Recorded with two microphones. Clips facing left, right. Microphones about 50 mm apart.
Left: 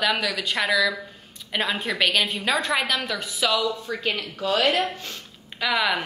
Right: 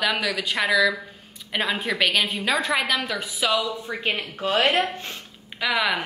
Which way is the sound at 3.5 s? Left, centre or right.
Right.